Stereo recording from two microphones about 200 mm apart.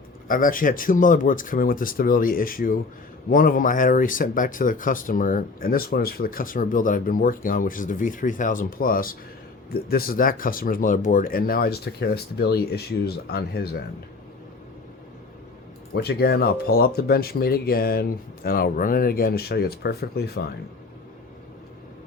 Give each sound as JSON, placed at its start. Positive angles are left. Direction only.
{"t": 0.3, "sound": "speech", "side_deg": 45}
{"t": 15.9, "sound": "speech", "side_deg": 55}